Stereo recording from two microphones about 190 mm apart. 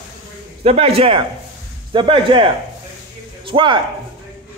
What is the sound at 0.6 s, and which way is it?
Speech, 30° right (ahead or behind).